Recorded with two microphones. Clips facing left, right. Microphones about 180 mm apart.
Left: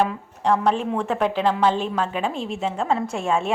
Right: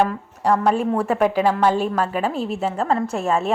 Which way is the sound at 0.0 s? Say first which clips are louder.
Right 2 dB; centre (ahead or behind).